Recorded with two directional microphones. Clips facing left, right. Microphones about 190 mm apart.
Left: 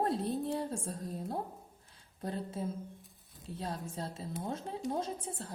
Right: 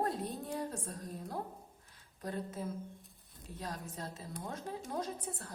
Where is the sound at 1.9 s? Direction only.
30° left (ahead or behind).